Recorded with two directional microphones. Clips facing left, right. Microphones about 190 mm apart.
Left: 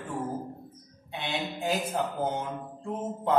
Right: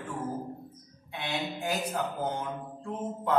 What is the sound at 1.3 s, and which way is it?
Speech, centre (ahead or behind).